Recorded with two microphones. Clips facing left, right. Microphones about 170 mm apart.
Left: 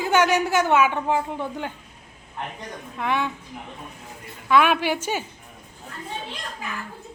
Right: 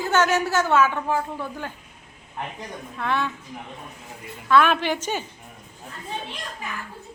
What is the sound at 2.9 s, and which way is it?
Speech, 15° left (ahead or behind).